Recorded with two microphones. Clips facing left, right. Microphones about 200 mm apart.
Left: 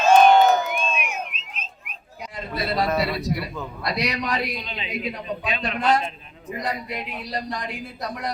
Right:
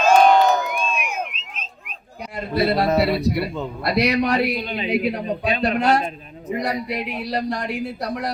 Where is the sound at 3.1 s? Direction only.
60° right (ahead or behind).